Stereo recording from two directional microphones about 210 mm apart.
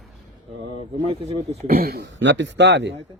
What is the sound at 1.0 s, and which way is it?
Speech, 25° right (ahead or behind).